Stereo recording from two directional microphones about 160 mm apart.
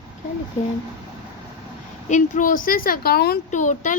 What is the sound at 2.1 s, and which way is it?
A woman's voice, 55° left (ahead or behind).